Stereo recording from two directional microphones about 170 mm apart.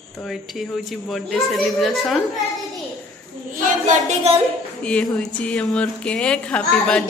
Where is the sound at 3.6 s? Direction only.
50° right (ahead or behind).